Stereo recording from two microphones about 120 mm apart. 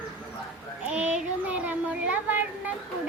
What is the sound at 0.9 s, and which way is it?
Speech, 10° right (ahead or behind).